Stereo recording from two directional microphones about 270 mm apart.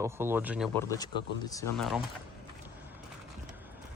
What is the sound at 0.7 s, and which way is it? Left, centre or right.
Speech, centre.